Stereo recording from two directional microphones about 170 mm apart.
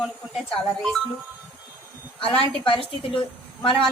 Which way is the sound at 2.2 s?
35° left (ahead or behind).